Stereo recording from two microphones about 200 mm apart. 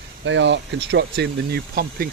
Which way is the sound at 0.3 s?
65° right (ahead or behind).